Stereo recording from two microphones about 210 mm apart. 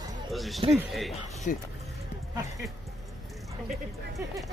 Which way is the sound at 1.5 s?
40° left (ahead or behind).